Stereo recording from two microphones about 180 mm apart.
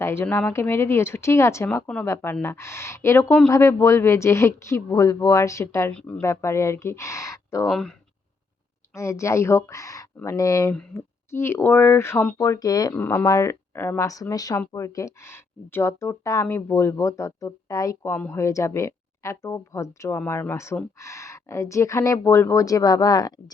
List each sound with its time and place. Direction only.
0.0 s speech: 15° left (ahead or behind)
7.7 s speech: 5° left (ahead or behind)
8.9 s speech: 15° left (ahead or behind)